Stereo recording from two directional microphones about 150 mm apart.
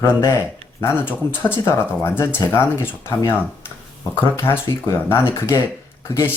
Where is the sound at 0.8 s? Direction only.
15° left (ahead or behind).